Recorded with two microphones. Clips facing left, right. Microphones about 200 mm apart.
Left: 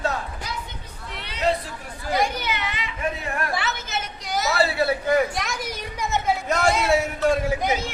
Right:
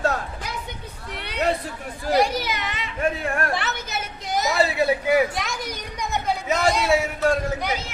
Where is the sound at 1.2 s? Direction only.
60° right (ahead or behind).